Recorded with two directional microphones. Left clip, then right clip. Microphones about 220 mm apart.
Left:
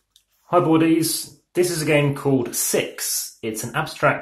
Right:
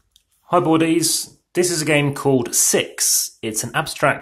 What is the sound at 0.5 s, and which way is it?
Speech, 35° right (ahead or behind).